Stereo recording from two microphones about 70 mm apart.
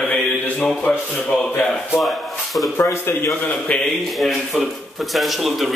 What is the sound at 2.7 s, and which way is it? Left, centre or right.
Speech, left.